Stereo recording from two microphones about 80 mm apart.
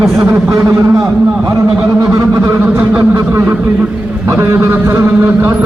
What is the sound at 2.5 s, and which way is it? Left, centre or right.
A man's voice, right.